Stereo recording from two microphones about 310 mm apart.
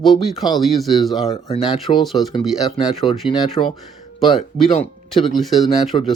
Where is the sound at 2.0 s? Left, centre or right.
Centre.